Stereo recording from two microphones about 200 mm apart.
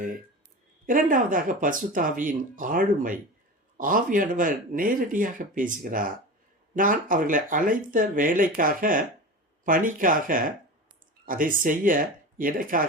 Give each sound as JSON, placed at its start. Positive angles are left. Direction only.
{"t": 0.9, "sound": "speech", "side_deg": -45}